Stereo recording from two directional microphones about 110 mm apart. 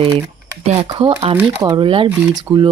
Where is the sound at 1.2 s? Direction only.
70° right (ahead or behind).